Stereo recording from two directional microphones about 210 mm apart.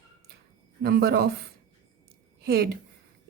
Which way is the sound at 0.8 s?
50° right (ahead or behind).